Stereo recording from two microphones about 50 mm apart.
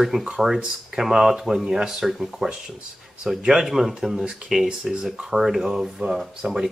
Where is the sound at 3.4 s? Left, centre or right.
Centre.